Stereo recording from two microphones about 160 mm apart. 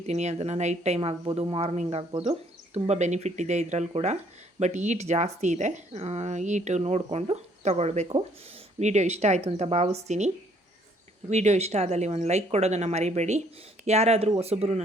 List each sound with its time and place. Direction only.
0.0 s speech: 45° right (ahead or behind)
1.2 s speech: 30° right (ahead or behind)